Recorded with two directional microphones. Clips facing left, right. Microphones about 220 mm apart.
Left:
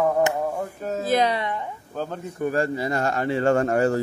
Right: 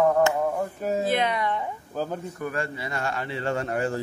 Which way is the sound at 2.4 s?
35° left (ahead or behind).